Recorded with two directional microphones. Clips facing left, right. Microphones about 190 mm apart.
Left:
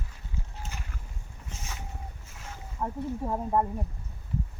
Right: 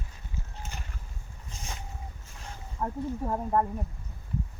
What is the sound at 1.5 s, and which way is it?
Boat, 35° right (ahead or behind).